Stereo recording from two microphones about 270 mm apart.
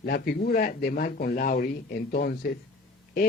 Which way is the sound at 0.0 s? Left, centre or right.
Left.